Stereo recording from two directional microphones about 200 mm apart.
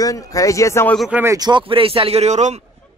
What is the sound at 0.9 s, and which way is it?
Speech, centre (ahead or behind).